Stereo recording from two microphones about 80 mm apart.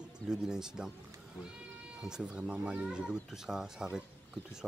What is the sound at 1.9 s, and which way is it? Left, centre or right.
Speech, centre.